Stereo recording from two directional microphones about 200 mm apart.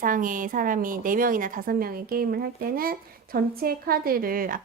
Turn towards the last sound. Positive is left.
turn(degrees=-45)  # may be behind; listen again after turning